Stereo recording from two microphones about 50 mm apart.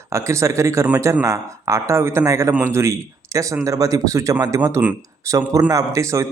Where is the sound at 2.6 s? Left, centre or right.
Right.